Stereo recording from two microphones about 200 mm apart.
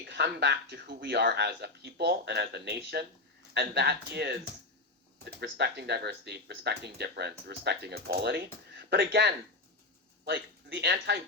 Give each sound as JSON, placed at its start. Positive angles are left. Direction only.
{"t": 0.0, "sound": "speech", "side_deg": -55}
{"t": 5.4, "sound": "speech", "side_deg": -55}